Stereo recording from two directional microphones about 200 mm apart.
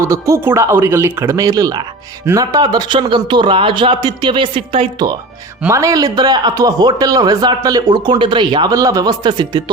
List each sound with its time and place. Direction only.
0.0 s a man's voice: 15° right (ahead or behind)